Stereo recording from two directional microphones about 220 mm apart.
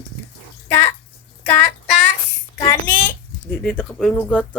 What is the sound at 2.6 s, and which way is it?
Speech, 15° left (ahead or behind).